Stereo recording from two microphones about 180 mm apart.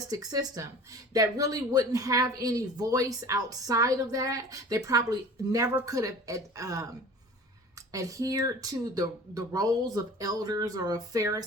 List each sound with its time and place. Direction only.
0.1 s a woman's voice: 20° right (ahead or behind)
7.9 s a woman's voice: 20° right (ahead or behind)